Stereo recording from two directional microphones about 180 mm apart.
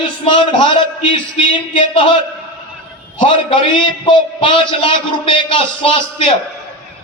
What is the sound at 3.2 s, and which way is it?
A man's voice, 30° left (ahead or behind).